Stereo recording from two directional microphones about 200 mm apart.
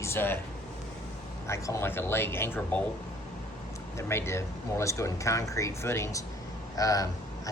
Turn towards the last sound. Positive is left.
turn(degrees=15)  # may be behind; listen again after turning